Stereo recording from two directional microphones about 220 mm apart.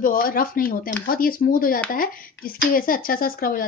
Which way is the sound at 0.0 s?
40° left (ahead or behind).